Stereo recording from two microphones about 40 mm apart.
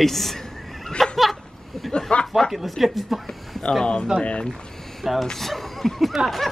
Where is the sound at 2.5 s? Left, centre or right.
Centre.